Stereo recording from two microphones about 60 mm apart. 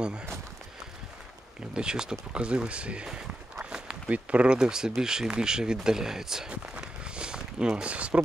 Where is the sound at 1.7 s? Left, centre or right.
Centre.